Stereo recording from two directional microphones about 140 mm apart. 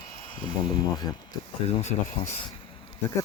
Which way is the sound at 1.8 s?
55° left (ahead or behind).